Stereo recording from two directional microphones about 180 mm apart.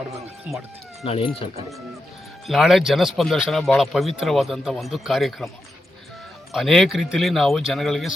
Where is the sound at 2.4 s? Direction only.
Centre (ahead or behind).